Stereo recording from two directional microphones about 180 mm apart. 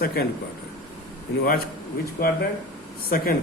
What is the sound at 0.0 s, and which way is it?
Speech, 60° left (ahead or behind).